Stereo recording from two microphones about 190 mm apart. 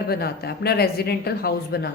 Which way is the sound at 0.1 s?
55° left (ahead or behind).